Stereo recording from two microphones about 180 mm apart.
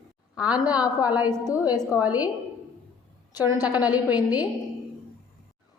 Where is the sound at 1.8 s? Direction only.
5° right (ahead or behind).